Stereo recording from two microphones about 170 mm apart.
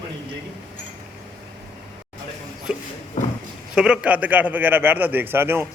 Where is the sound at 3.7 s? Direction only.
5° right (ahead or behind).